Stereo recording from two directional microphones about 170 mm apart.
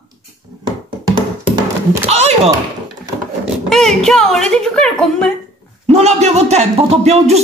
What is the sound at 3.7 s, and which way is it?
A woman's voice, centre (ahead or behind).